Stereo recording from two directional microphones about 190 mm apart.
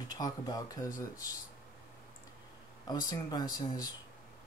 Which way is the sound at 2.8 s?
20° left (ahead or behind).